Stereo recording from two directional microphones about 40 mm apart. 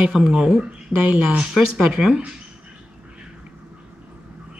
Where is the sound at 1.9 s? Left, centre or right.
Centre.